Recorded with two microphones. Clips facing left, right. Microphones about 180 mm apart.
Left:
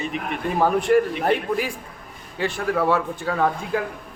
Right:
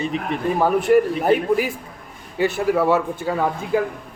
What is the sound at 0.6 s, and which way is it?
Speech, 5° right (ahead or behind).